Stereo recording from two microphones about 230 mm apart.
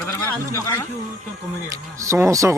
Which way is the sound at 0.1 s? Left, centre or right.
Centre.